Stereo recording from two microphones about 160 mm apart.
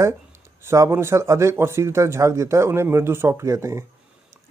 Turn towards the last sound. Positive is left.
turn(degrees=-15)  # may be behind; listen again after turning